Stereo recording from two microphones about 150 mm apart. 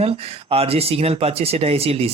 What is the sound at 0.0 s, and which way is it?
Speech, 40° right (ahead or behind).